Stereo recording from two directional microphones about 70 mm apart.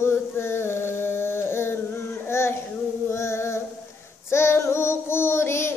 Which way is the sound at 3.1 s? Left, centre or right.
Left.